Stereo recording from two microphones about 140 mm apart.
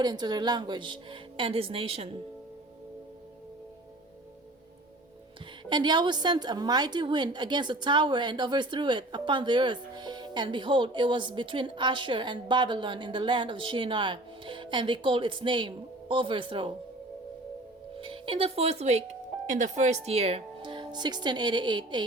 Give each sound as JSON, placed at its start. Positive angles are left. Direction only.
{"t": 0.0, "sound": "a woman's voice", "side_deg": -30}
{"t": 5.6, "sound": "a woman's voice", "side_deg": -30}
{"t": 17.9, "sound": "speech", "side_deg": -40}